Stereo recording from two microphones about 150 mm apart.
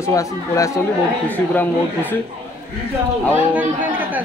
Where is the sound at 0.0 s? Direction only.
20° left (ahead or behind).